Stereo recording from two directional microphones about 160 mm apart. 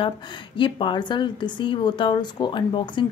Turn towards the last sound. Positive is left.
turn(degrees=30)  # may be behind; listen again after turning